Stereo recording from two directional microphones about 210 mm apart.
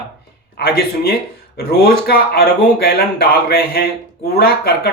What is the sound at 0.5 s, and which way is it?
Speech, 45° left (ahead or behind).